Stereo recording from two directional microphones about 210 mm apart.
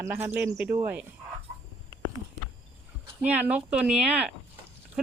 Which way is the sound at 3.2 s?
5° right (ahead or behind).